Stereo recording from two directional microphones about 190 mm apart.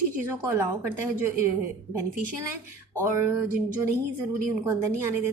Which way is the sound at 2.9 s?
15° right (ahead or behind).